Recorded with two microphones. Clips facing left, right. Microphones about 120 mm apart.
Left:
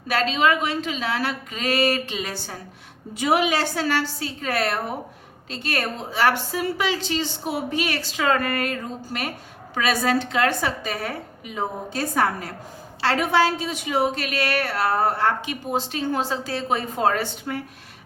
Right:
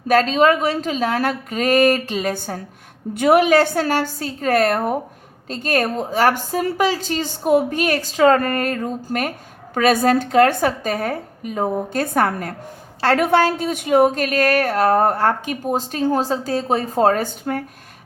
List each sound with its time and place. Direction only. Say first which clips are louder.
0.1 s a woman's voice: right 6 dB; 40° right (ahead or behind)